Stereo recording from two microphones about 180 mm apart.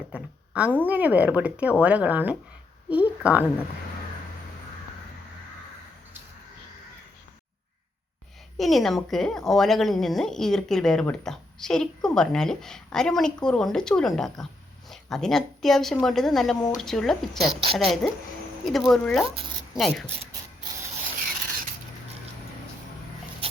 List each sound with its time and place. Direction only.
0.1 s a woman's voice: 5° right (ahead or behind)
8.5 s a woman's voice: centre (ahead or behind)
23.4 s rodents: 30° right (ahead or behind)